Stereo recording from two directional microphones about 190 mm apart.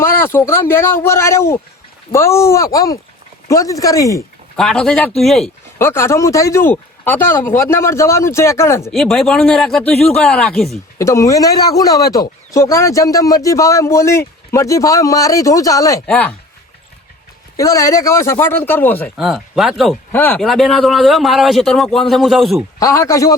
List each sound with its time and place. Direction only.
0.0 s a man's voice: 10° left (ahead or behind)
4.5 s a man's voice: 5° left (ahead or behind)
5.8 s a man's voice: 15° left (ahead or behind)
8.9 s a man's voice: centre (ahead or behind)
10.9 s a man's voice: 15° left (ahead or behind)
17.6 s a man's voice: 15° left (ahead or behind)
19.1 s a man's voice: centre (ahead or behind)
22.8 s a man's voice: 15° left (ahead or behind)